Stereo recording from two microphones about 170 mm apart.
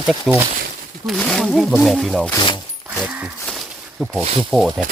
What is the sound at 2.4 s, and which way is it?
Speech, 25° left (ahead or behind).